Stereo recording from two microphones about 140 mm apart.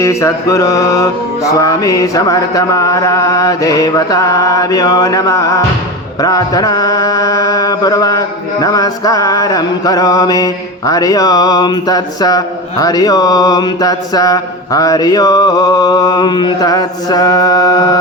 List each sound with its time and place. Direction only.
0.0 s mantra: 20° left (ahead or behind)